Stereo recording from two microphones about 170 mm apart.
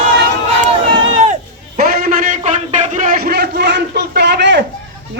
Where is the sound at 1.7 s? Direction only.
55° right (ahead or behind).